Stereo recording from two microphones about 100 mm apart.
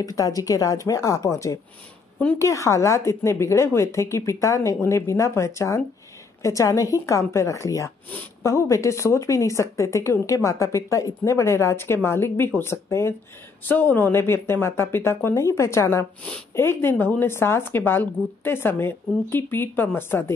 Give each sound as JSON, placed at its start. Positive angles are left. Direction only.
{"t": 0.0, "sound": "speech", "side_deg": 35}